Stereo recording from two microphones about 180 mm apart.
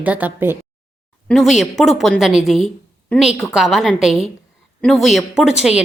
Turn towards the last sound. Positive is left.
turn(degrees=-5)  # may be behind; listen again after turning